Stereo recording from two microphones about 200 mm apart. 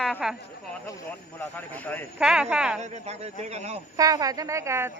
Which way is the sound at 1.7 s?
10° left (ahead or behind).